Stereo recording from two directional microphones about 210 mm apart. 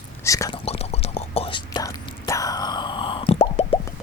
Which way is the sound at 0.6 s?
30° left (ahead or behind).